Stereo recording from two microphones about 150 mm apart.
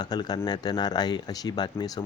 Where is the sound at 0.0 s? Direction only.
30° left (ahead or behind).